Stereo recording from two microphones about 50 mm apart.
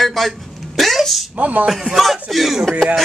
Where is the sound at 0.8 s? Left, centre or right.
Centre.